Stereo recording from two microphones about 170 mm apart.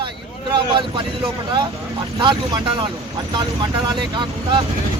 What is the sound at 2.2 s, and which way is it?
Speech, 25° right (ahead or behind).